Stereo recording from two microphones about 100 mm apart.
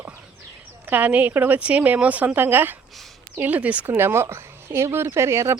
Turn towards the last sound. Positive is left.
turn(degrees=-30)  # may be behind; listen again after turning